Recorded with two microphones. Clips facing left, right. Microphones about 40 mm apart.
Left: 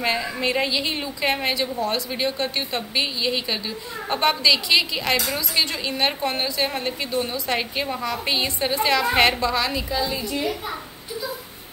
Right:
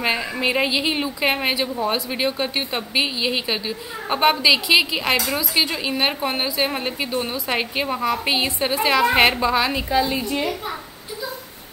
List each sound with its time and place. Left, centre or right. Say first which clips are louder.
0.0 s a woman's voice: right 2 dB; centre